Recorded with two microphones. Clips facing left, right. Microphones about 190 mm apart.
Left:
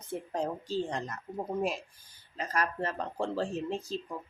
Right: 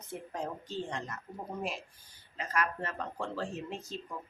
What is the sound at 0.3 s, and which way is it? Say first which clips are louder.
Speech: left 6 dB; 35° left (ahead or behind).